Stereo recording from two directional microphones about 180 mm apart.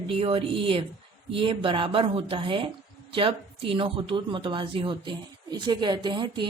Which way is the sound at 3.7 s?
30° right (ahead or behind).